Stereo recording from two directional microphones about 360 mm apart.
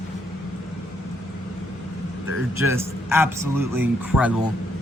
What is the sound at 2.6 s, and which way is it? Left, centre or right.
A man's voice, centre.